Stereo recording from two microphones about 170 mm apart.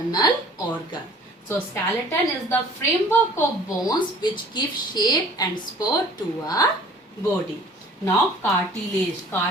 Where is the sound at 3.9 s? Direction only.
25° left (ahead or behind).